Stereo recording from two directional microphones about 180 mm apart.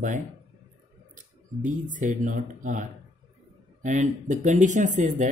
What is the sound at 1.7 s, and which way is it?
Speech, 45° right (ahead or behind).